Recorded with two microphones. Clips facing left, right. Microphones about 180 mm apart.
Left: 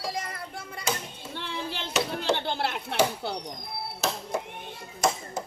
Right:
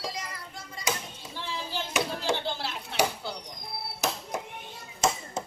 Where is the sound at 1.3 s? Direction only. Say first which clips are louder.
Even; 60° left (ahead or behind).